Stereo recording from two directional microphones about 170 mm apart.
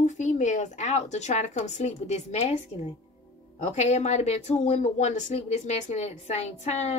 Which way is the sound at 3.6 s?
40° left (ahead or behind).